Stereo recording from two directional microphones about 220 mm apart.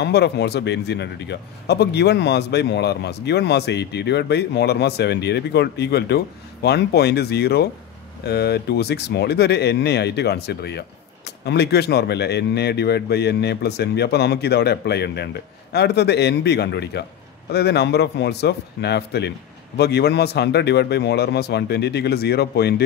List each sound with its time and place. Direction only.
0.0 s a man's voice: 50° left (ahead or behind)